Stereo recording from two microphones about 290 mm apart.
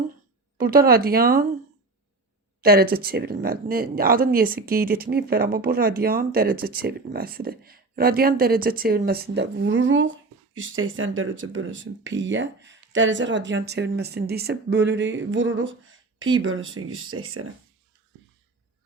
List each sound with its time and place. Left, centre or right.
0.6 s speech: right
2.6 s speech: right